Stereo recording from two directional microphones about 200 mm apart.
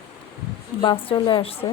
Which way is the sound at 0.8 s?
25° left (ahead or behind).